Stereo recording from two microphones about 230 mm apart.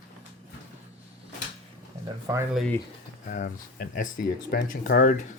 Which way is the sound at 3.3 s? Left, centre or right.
Left.